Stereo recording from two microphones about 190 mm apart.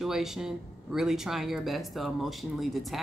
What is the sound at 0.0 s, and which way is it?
Speech, centre (ahead or behind).